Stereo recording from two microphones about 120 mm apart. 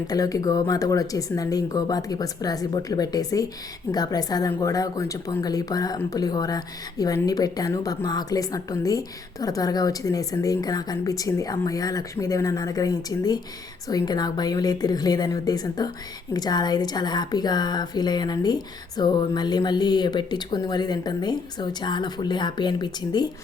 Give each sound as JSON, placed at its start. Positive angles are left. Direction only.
{"t": 0.1, "sound": "a woman's voice", "side_deg": 30}